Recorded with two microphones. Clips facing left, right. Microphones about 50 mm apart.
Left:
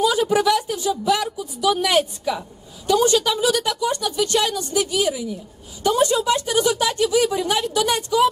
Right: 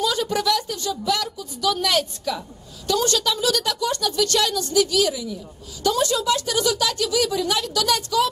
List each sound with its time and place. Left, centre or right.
0.0 s a woman's voice: centre